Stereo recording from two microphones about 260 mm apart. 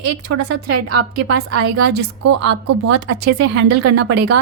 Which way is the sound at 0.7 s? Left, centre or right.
Right.